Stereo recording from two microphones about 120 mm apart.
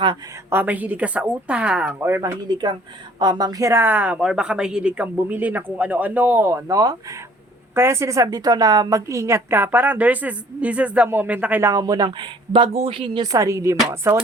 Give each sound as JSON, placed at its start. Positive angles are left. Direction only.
{"t": 0.5, "sound": "speech", "side_deg": -15}
{"t": 2.0, "sound": "a woman's voice", "side_deg": -20}
{"t": 2.5, "sound": "a woman's voice", "side_deg": -40}
{"t": 11.7, "sound": "a woman's voice", "side_deg": -30}
{"t": 13.3, "sound": "a woman's voice", "side_deg": -25}